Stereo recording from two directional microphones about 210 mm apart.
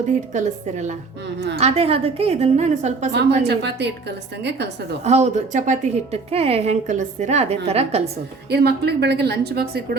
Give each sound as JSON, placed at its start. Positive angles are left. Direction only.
{"t": 0.3, "sound": "a woman's voice", "side_deg": -35}
{"t": 3.1, "sound": "a woman's voice", "side_deg": -55}
{"t": 5.0, "sound": "a woman's voice", "side_deg": -30}
{"t": 8.4, "sound": "a woman's voice", "side_deg": -50}